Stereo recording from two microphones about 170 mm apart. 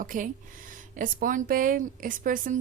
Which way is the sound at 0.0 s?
50° right (ahead or behind).